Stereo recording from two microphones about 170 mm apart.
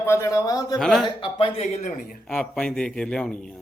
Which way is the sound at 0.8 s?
Centre (ahead or behind).